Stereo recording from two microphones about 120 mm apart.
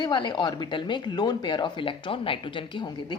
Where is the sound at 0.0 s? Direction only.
40° left (ahead or behind).